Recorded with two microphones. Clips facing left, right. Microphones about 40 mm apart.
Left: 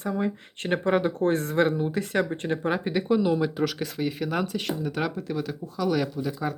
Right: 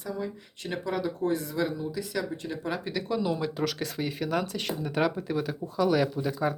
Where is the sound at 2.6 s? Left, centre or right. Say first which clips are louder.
Left 6 dB; left.